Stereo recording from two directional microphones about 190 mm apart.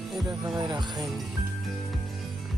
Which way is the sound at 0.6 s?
25° right (ahead or behind).